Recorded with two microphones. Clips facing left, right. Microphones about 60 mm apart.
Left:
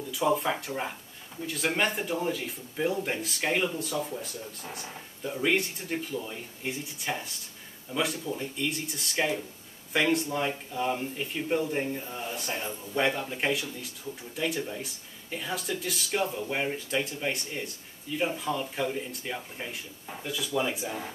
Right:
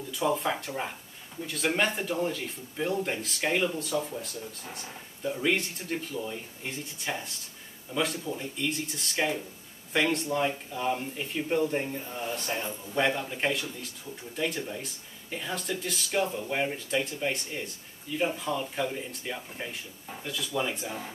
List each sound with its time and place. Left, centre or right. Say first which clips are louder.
0.1 s speech: left 1 dB; centre